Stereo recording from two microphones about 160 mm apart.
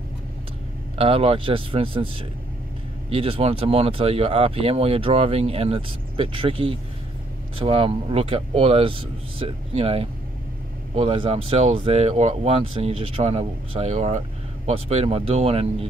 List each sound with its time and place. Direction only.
0.9 s speech: 35° right (ahead or behind)
3.1 s speech: 35° right (ahead or behind)